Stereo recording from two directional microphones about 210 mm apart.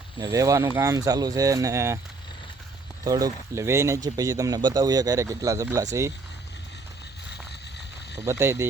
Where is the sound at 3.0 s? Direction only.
15° right (ahead or behind).